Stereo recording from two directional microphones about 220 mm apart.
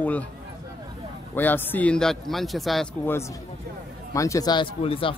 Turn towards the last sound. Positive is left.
turn(degrees=25)  # may be behind; listen again after turning